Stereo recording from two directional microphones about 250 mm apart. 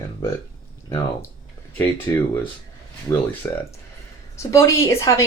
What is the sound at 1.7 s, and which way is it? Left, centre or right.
Speech, centre.